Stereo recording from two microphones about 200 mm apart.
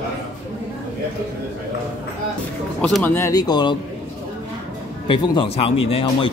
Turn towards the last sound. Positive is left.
turn(degrees=25)  # may be behind; listen again after turning